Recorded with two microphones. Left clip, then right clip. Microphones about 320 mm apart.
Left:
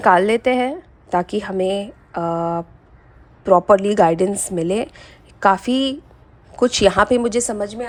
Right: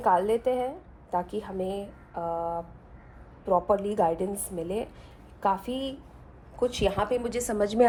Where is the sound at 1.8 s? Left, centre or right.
Left.